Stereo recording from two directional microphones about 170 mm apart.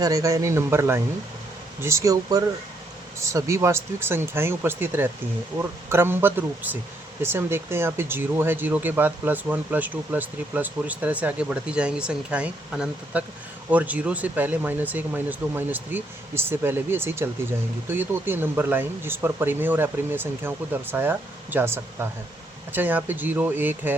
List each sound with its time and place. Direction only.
0.0 s speech: 20° right (ahead or behind)